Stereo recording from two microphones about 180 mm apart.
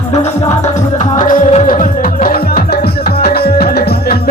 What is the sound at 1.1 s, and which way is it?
Music, 45° left (ahead or behind).